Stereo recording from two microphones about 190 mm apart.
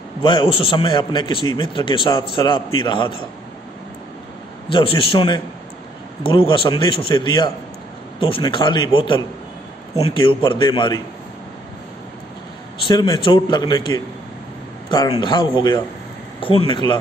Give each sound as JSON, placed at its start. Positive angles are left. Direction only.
{"t": 0.2, "sound": "a man's voice", "side_deg": 25}
{"t": 4.6, "sound": "a man's voice", "side_deg": 25}
{"t": 12.8, "sound": "a man's voice", "side_deg": 25}